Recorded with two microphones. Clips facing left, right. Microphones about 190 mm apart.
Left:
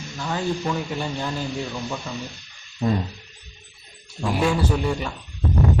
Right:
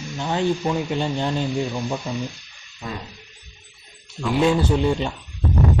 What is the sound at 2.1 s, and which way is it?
Sizzle, 15° right (ahead or behind).